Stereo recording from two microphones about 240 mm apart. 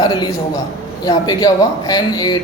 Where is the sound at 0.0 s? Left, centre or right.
Centre.